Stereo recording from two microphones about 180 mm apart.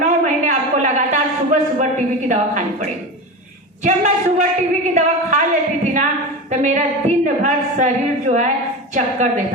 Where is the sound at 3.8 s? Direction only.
45° right (ahead or behind).